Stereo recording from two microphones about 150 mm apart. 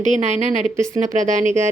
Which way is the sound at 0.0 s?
55° right (ahead or behind).